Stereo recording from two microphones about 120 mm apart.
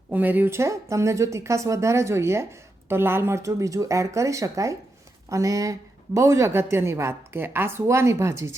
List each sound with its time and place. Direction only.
0.1 s speech: 15° right (ahead or behind)